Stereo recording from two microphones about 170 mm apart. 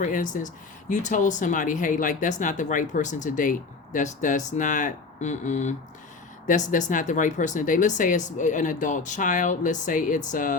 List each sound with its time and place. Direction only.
0.0 s speech: 45° left (ahead or behind)